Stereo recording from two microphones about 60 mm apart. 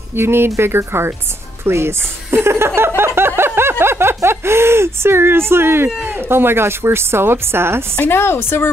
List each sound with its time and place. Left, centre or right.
0.1 s a woman's voice: right
3.0 s a sound: right
3.8 s a woman's voice: right
8.0 s a woman's voice: left